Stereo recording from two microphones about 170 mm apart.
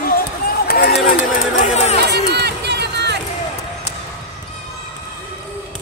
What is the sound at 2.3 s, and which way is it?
Run, 75° right (ahead or behind).